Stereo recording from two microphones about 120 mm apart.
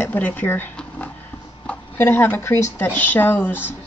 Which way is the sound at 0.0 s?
15° left (ahead or behind).